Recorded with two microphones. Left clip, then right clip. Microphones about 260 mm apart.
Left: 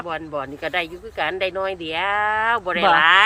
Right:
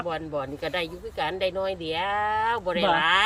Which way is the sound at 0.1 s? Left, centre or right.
Centre.